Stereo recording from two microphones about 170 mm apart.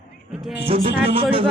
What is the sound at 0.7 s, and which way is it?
Speech, 35° right (ahead or behind).